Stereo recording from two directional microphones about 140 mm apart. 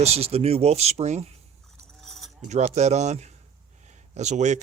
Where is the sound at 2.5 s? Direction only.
55° right (ahead or behind).